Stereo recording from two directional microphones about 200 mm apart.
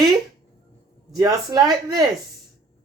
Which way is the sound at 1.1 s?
20° right (ahead or behind).